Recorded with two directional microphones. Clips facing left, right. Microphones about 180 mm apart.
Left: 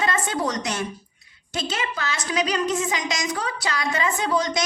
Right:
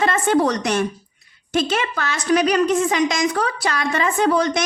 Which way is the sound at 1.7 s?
55° right (ahead or behind).